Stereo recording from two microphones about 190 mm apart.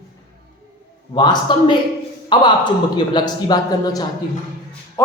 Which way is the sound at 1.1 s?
20° left (ahead or behind).